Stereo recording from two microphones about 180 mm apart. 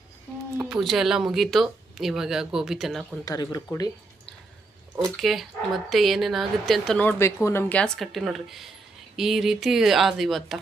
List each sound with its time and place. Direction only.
0.6 s speech: centre (ahead or behind)
3.2 s speech: 20° left (ahead or behind)
4.9 s speech: centre (ahead or behind)